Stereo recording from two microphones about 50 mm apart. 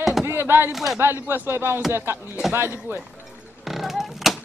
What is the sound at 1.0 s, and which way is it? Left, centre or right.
Speech, right.